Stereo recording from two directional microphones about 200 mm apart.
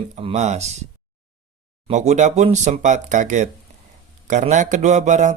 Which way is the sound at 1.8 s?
35° right (ahead or behind).